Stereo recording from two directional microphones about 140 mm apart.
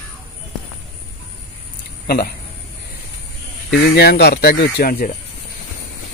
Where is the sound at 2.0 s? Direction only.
90° left.